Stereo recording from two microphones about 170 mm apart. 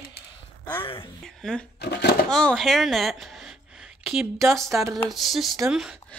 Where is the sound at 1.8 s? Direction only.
80° left.